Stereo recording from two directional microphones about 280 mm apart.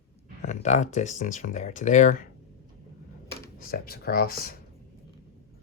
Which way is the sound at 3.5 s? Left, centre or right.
Left.